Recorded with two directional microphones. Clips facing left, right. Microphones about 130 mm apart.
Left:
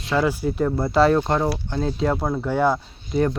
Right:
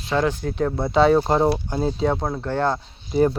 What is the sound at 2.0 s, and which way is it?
Speech, centre (ahead or behind).